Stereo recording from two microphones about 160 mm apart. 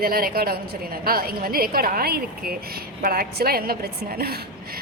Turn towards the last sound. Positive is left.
turn(degrees=-75)  # may be behind; listen again after turning